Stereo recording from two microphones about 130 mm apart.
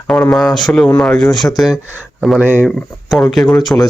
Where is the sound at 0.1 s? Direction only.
5° left (ahead or behind).